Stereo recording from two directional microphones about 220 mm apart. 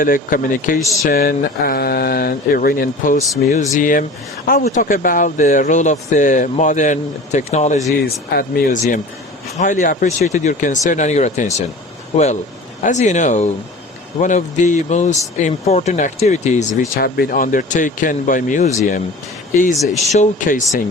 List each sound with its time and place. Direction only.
0.0 s speech: 40° left (ahead or behind)
16.9 s speech: 40° left (ahead or behind)
19.7 s speech: centre (ahead or behind)
20.1 s speech: 30° left (ahead or behind)